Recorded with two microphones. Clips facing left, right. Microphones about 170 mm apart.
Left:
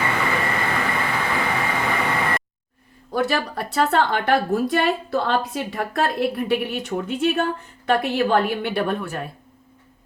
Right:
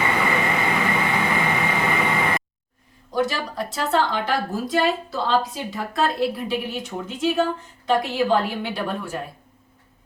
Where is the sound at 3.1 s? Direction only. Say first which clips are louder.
Left 2 dB; 60° left (ahead or behind).